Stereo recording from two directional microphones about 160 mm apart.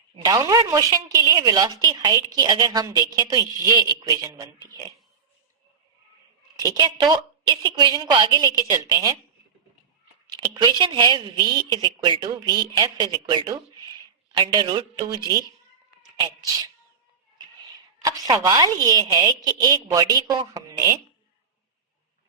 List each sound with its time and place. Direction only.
0.3 s a woman's voice: 25° right (ahead or behind)
6.6 s a woman's voice: 25° right (ahead or behind)
10.8 s a woman's voice: 25° right (ahead or behind)
18.0 s a woman's voice: 20° right (ahead or behind)